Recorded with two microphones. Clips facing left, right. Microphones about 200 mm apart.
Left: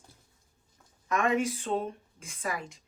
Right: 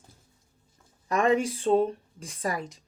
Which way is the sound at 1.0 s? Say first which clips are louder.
Right 4 dB; 35° right (ahead or behind).